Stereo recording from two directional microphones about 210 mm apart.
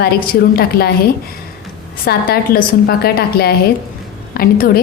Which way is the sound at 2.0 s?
45° left (ahead or behind).